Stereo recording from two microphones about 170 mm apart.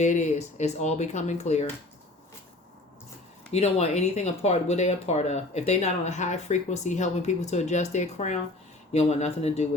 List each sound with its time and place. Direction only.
0.0 s speech: 45° left (ahead or behind)
3.5 s speech: 40° left (ahead or behind)